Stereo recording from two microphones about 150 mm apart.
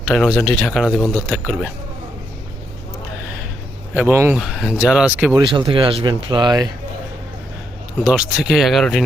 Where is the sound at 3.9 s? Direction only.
15° right (ahead or behind).